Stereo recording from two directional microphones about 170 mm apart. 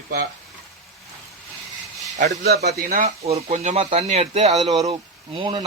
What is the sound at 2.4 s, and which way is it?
Speech, 70° right (ahead or behind).